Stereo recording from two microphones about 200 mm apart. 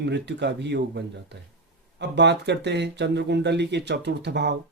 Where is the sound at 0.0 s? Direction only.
60° right (ahead or behind).